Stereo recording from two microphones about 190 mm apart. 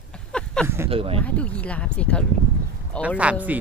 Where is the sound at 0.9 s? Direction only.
30° right (ahead or behind).